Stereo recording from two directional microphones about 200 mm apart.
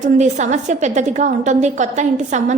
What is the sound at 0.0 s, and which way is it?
A woman's voice, 35° right (ahead or behind).